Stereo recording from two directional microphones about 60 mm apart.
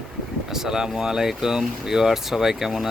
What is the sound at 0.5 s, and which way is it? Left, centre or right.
Speech, centre.